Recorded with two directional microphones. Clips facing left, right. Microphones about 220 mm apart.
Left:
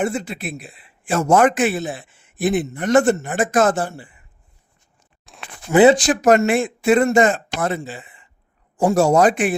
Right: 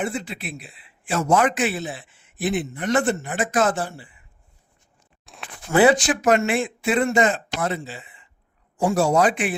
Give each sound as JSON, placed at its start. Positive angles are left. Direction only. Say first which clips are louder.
{"t": 0.0, "sound": "a man's voice", "louder": "left 5 dB", "side_deg": 45}
{"t": 5.2, "sound": "a sound", "louder": "even", "side_deg": 0}
{"t": 5.7, "sound": "speech", "louder": "left 4 dB", "side_deg": 20}
{"t": 6.0, "sound": "a man's voice", "louder": "left 4 dB", "side_deg": 40}